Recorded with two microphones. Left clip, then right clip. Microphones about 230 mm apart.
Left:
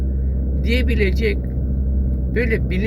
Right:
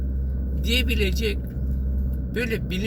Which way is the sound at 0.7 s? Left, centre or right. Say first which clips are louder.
Left 3 dB; centre.